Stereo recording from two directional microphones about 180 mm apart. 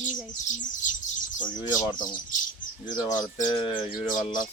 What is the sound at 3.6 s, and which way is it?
Speech, 30° left (ahead or behind).